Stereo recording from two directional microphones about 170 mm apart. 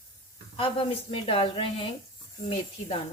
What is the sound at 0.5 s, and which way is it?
A woman's voice, 30° left (ahead or behind).